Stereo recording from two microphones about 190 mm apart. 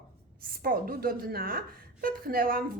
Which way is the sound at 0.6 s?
50° right (ahead or behind).